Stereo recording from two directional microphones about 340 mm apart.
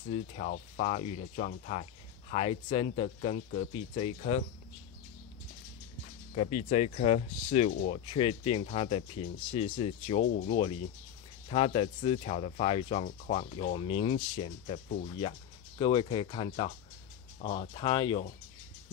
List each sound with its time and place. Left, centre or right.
0.1 s speech: centre
6.3 s speech: centre